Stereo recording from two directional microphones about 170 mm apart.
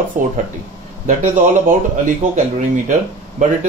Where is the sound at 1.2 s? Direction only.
50° right (ahead or behind).